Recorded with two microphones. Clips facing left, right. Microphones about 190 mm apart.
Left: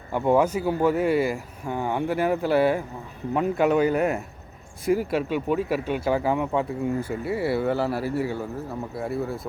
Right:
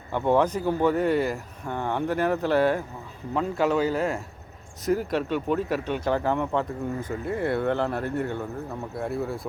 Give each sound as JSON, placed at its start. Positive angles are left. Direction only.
{"t": 0.1, "sound": "a man's voice", "side_deg": 10}
{"t": 4.9, "sound": "speech", "side_deg": 10}